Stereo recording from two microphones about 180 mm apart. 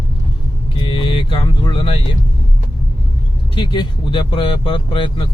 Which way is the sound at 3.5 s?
25° left (ahead or behind).